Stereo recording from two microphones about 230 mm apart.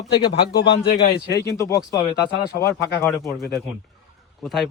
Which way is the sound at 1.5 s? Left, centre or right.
Centre.